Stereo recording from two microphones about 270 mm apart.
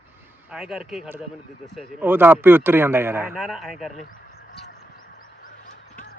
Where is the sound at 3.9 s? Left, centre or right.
Left.